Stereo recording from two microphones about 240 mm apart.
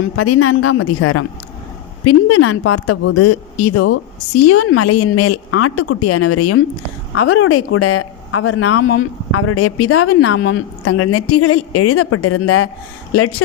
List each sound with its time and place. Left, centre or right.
0.2 s speech: left
7.1 s speech: left